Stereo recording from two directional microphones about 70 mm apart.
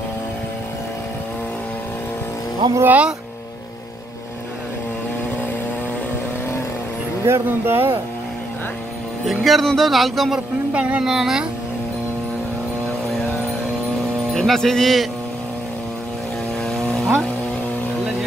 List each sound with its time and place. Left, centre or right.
2.6 s speech: right
7.2 s speech: right
9.2 s speech: centre
10.7 s a sound: centre
11.1 s speech: centre
14.3 s speech: centre
16.6 s vehicle: centre